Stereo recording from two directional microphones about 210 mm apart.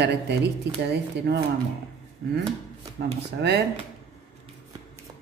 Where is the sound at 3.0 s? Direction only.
50° right (ahead or behind).